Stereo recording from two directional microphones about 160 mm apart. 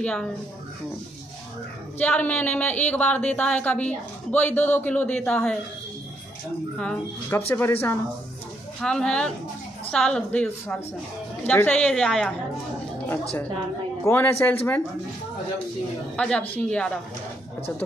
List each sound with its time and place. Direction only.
0.0 s speech: 5° left (ahead or behind)
2.0 s speech: 10° left (ahead or behind)
6.8 s speech: 10° left (ahead or behind)
14.0 s speech: 10° left (ahead or behind)
16.2 s speech: 5° left (ahead or behind)